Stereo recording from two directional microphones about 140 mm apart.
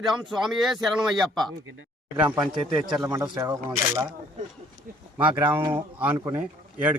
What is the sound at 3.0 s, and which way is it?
Speech, 25° right (ahead or behind).